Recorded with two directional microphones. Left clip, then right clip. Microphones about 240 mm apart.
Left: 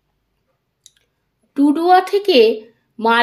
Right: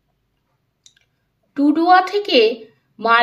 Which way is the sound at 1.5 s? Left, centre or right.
Left.